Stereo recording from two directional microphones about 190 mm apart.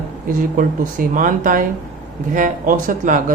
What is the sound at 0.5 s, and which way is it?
Speech, 45° right (ahead or behind).